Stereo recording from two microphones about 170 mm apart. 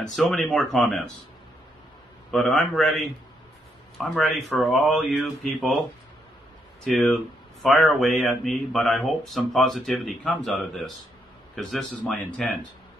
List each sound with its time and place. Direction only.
0.1 s speech: centre (ahead or behind)
2.3 s speech: centre (ahead or behind)
6.8 s speech: centre (ahead or behind)